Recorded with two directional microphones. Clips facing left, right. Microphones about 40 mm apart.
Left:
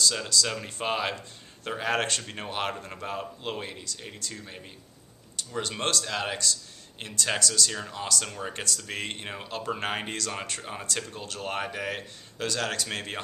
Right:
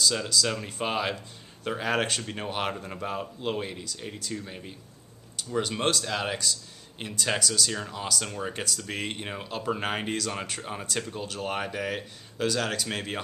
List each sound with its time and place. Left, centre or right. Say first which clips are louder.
0.3 s speech: right 1 dB; centre